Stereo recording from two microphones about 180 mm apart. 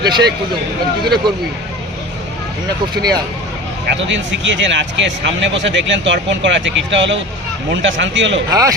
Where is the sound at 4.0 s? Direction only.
85° right.